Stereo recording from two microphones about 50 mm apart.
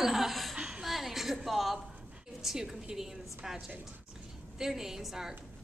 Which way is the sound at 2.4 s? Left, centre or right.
Centre.